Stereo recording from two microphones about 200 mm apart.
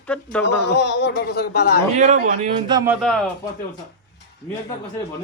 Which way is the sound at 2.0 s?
35° right (ahead or behind).